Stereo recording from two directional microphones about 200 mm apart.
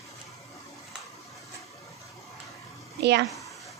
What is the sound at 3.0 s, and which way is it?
Speech, 60° right (ahead or behind).